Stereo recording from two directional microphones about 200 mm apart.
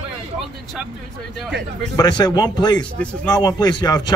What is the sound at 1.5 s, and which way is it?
Speech, 60° right (ahead or behind).